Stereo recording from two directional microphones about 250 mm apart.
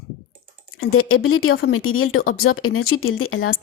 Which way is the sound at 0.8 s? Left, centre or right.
Left.